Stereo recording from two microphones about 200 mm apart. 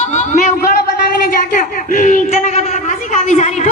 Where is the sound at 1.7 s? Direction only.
40° left (ahead or behind).